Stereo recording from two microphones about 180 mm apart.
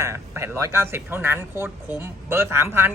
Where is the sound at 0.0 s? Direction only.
15° right (ahead or behind).